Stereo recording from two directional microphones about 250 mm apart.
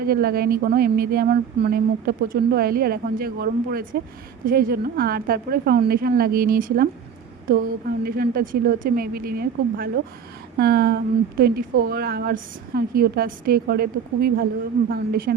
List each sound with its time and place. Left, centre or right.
0.0 s speech: right